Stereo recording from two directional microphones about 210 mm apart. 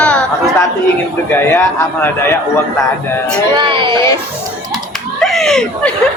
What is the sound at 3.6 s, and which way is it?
Speech, 25° right (ahead or behind).